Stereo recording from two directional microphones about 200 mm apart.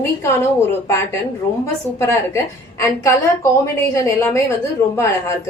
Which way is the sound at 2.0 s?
15° left (ahead or behind).